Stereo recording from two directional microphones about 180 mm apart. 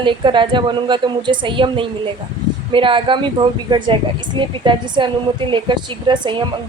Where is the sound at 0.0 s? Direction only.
25° right (ahead or behind).